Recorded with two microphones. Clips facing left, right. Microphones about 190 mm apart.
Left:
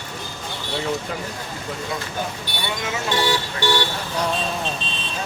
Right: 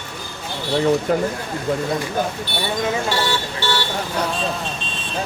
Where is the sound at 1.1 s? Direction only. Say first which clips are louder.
Right 11 dB; 55° right (ahead or behind).